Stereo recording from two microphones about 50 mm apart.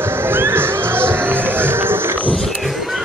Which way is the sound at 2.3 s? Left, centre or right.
Centre.